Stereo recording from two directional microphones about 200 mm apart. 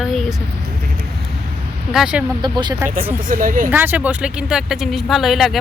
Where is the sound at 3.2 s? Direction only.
45° right (ahead or behind).